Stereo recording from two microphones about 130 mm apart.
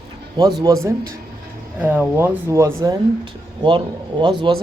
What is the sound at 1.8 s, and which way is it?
Speech, 15° right (ahead or behind).